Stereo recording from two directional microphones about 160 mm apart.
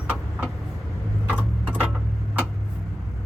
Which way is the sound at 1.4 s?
10° left (ahead or behind).